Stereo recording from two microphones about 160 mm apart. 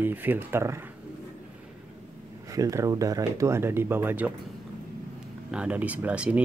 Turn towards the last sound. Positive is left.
turn(degrees=-10)  # may be behind; listen again after turning